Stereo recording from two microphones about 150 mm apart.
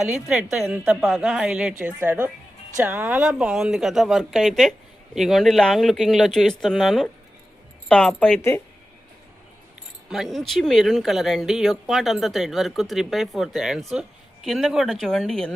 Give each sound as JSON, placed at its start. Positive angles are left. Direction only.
{"t": 0.0, "sound": "a woman's voice", "side_deg": -5}
{"t": 8.4, "sound": "speech", "side_deg": 15}
{"t": 10.1, "sound": "speech", "side_deg": 0}